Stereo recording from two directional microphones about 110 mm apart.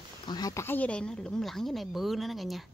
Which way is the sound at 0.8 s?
10° left (ahead or behind).